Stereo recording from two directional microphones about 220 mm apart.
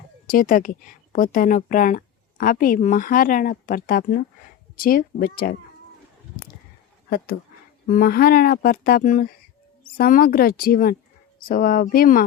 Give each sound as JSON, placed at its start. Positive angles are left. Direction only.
{"t": 0.3, "sound": "a woman's voice", "side_deg": 40}
{"t": 7.9, "sound": "a woman's voice", "side_deg": 40}